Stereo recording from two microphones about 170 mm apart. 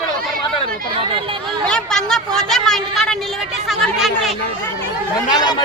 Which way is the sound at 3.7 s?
Centre (ahead or behind).